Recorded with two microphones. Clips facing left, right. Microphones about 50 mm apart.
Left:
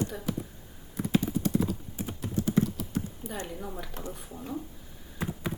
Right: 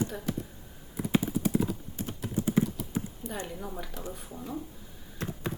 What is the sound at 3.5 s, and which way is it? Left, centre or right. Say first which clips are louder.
Speech: even; centre.